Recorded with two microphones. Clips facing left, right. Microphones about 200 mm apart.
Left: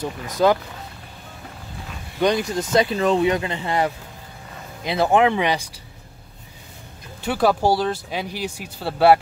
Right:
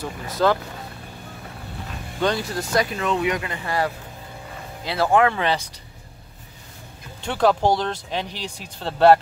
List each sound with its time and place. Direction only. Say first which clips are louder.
0.0 s speech: left 2 dB; 15° left (ahead or behind)
2.1 s speech: left 3 dB; 15° left (ahead or behind)
7.2 s speech: even; 10° left (ahead or behind)